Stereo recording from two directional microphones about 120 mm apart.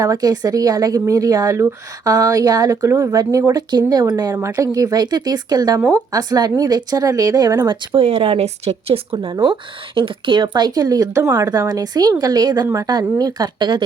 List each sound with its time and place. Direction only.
0.0 s speech: 30° right (ahead or behind)
7.7 s speech: 50° right (ahead or behind)
9.1 s speech: 40° right (ahead or behind)